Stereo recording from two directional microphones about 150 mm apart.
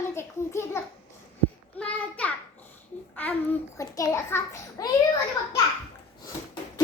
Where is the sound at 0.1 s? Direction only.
15° left (ahead or behind).